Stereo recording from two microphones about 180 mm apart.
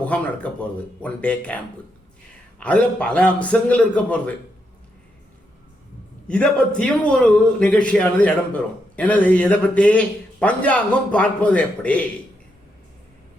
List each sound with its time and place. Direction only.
0.0 s a man's voice: 5° left (ahead or behind)
6.2 s a man's voice: 5° left (ahead or behind)